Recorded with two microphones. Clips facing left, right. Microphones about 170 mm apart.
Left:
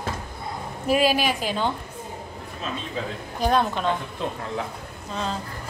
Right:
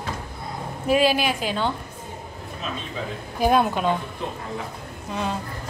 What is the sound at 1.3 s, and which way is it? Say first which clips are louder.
Speech: even; 40° left (ahead or behind).